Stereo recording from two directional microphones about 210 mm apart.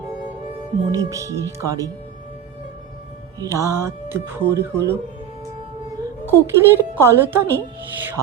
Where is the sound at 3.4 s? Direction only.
15° right (ahead or behind).